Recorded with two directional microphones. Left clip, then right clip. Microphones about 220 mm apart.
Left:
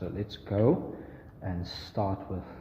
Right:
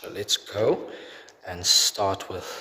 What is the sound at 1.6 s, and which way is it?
Speech, 50° right (ahead or behind).